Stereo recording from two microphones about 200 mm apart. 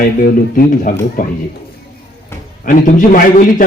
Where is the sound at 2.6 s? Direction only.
45° left (ahead or behind).